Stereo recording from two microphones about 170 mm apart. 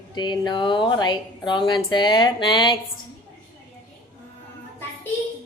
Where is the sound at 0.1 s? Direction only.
25° left (ahead or behind).